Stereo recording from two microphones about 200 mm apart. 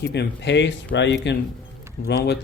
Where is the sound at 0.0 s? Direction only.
55° left (ahead or behind).